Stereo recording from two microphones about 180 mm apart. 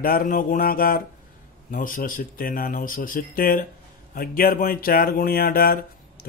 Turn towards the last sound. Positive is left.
turn(degrees=55)  # may be behind; listen again after turning